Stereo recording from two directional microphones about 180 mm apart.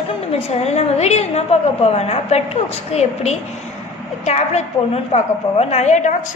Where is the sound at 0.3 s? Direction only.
35° left (ahead or behind).